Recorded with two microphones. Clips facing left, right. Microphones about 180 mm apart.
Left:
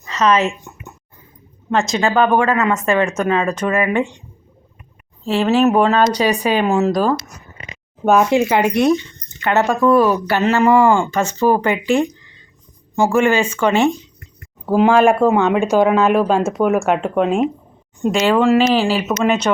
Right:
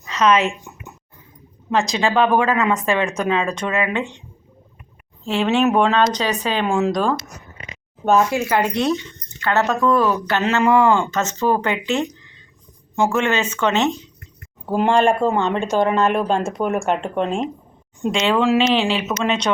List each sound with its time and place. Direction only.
0.0 s speech: centre (ahead or behind)
1.7 s speech: centre (ahead or behind)
5.2 s speech: 5° left (ahead or behind)
8.3 s speech: 15° left (ahead or behind)
13.0 s speech: 10° left (ahead or behind)